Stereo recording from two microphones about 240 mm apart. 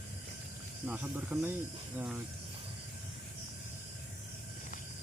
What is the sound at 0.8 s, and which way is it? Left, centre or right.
Speech, centre.